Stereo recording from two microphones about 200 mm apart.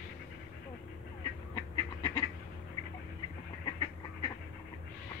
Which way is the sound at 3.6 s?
20° left (ahead or behind).